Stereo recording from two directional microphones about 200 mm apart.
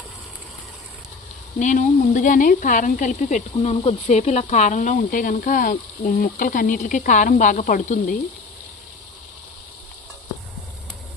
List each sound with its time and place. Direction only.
1.5 s speech: 40° left (ahead or behind)